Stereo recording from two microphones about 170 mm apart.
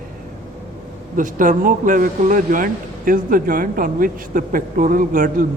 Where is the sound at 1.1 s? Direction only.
50° right (ahead or behind).